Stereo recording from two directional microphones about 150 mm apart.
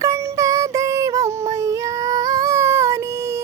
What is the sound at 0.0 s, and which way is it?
Music, 20° right (ahead or behind).